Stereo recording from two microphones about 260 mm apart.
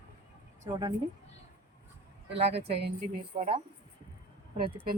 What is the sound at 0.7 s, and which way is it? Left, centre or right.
Speech, centre.